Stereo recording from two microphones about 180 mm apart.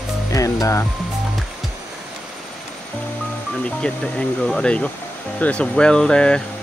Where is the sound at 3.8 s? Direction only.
5° left (ahead or behind).